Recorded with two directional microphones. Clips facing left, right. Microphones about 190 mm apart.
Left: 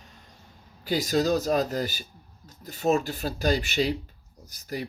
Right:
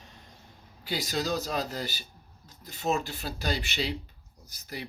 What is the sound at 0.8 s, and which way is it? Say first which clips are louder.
Speech: left 7 dB; 45° left (ahead or behind).